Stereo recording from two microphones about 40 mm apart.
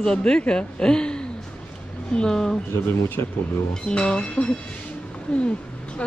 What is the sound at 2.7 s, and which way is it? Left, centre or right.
Speech, left.